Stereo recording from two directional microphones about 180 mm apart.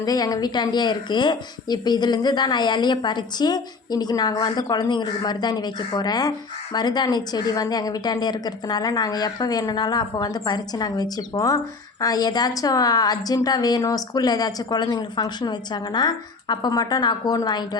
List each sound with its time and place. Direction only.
0.0 s a woman's voice: 20° left (ahead or behind)